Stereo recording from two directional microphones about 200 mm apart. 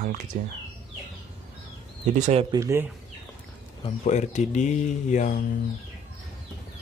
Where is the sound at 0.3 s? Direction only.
40° right (ahead or behind).